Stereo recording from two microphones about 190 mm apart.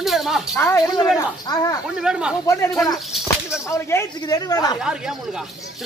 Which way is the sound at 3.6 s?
15° left (ahead or behind).